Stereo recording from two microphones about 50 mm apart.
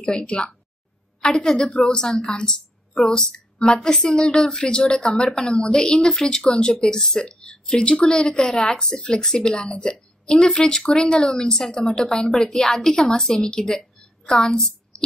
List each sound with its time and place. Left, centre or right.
0.0 s a woman's voice: left
2.2 s a sound: centre
3.1 s a woman's voice: centre